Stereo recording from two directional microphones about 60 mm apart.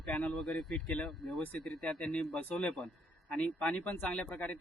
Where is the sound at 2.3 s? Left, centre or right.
Left.